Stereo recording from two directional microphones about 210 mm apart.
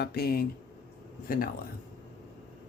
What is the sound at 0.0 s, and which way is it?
Speech, 50° left (ahead or behind).